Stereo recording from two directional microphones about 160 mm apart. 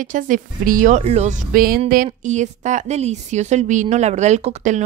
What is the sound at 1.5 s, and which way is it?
Music, 60° right (ahead or behind).